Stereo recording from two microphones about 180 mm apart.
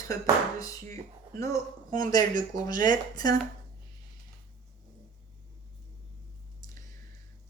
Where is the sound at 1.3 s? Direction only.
15° left (ahead or behind).